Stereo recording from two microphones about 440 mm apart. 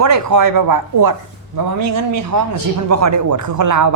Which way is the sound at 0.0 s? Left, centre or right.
Right.